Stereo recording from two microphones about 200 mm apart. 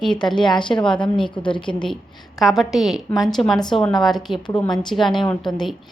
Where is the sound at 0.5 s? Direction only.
25° left (ahead or behind).